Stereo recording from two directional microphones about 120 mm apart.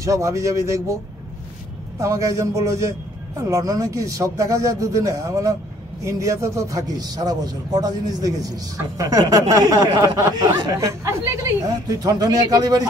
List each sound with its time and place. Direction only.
0.0 s speech: 25° right (ahead or behind)
2.0 s a man's voice: 25° right (ahead or behind)